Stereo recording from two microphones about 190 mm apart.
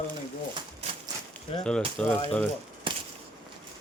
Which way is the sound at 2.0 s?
5° left (ahead or behind).